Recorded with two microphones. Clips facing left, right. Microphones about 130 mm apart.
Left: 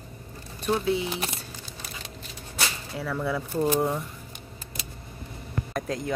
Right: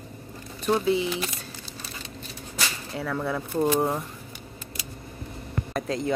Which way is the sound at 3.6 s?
30° right (ahead or behind).